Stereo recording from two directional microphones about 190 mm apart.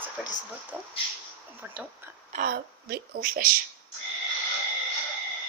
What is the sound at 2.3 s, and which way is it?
A woman's voice, 50° right (ahead or behind).